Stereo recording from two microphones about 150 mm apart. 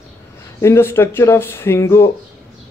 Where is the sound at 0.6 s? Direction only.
15° left (ahead or behind).